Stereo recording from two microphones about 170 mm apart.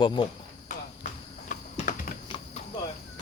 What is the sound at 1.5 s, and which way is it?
Typing, 45° left (ahead or behind).